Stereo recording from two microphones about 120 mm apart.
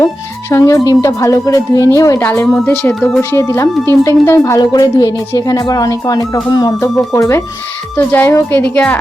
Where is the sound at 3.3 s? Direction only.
25° left (ahead or behind).